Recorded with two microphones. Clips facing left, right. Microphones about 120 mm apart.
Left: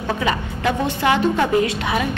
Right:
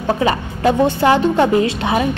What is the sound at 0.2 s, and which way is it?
A woman's voice, 35° right (ahead or behind).